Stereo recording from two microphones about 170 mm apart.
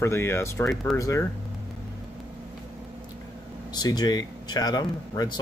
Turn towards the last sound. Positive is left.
turn(degrees=25)  # may be behind; listen again after turning